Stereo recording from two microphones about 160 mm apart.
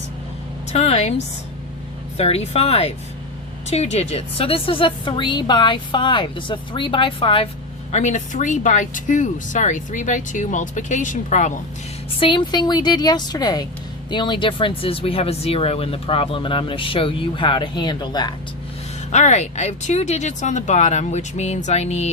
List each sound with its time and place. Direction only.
0.7 s speech: 40° left (ahead or behind)
2.1 s speech: 40° left (ahead or behind)
7.9 s speech: 50° left (ahead or behind)
12.2 s a woman's voice: 30° left (ahead or behind)
19.1 s speech: 45° left (ahead or behind)